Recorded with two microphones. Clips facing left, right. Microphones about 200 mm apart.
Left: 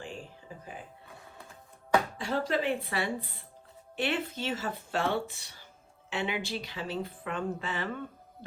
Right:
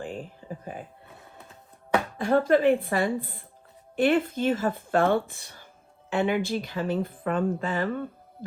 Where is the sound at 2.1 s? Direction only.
55° right (ahead or behind).